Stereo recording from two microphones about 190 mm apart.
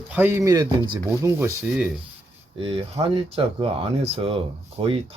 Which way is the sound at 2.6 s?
30° right (ahead or behind).